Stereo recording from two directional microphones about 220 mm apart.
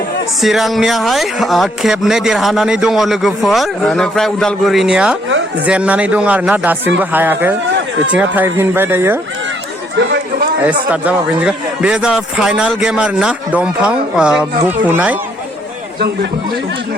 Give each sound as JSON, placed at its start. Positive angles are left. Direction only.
{"t": 0.4, "sound": "speech", "side_deg": 0}
{"t": 10.0, "sound": "chatter", "side_deg": -55}
{"t": 10.9, "sound": "speech", "side_deg": -5}